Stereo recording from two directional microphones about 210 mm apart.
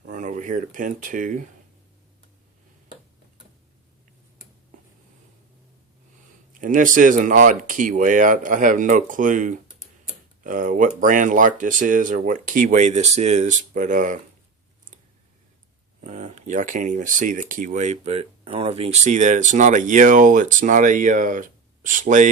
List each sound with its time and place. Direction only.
0.0 s speech: 40° right (ahead or behind)
6.5 s speech: 40° right (ahead or behind)
16.0 s speech: 35° right (ahead or behind)